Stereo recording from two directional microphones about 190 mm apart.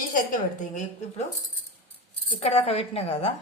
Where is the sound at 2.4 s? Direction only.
35° left (ahead or behind).